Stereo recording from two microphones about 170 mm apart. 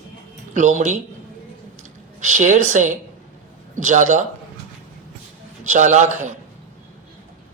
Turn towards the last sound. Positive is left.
turn(degrees=-45)  # may be behind; listen again after turning